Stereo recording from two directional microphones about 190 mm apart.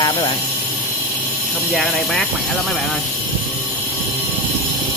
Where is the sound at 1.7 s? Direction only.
Centre (ahead or behind).